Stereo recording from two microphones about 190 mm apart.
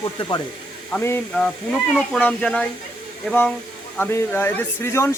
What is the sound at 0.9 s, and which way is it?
Speech, 10° left (ahead or behind).